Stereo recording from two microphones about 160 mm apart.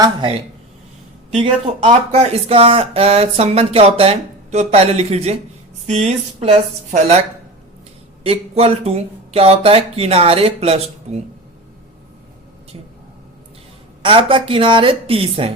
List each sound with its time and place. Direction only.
0.0 s speech: 30° right (ahead or behind)
1.4 s speech: 35° right (ahead or behind)
8.2 s speech: 40° right (ahead or behind)
14.0 s speech: 35° right (ahead or behind)